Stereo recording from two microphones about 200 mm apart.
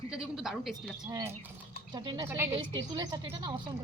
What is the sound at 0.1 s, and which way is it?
Speech, 5° right (ahead or behind).